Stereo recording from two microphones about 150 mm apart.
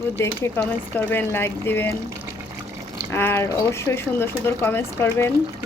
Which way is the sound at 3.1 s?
15° left (ahead or behind).